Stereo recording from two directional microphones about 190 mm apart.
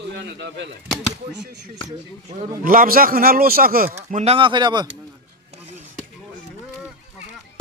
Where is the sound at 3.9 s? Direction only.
35° right (ahead or behind).